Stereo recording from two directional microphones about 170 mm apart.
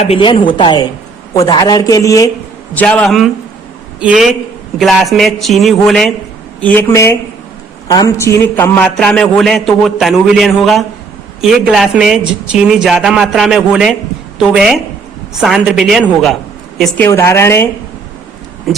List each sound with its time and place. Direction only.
0.0 s a man's voice: 30° left (ahead or behind)
2.7 s a man's voice: 5° left (ahead or behind)
17.1 s speech: 15° left (ahead or behind)